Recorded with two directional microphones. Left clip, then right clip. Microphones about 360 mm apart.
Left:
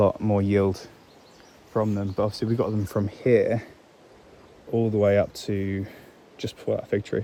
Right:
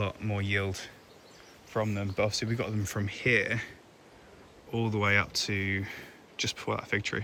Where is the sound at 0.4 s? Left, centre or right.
Centre.